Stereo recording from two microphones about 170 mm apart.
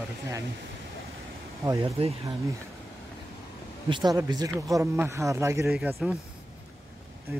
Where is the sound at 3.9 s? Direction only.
25° right (ahead or behind).